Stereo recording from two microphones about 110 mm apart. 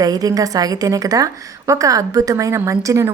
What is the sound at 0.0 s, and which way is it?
A woman's voice, 35° right (ahead or behind).